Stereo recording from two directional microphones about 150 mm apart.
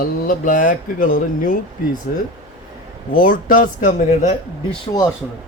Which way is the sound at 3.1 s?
70° left (ahead or behind).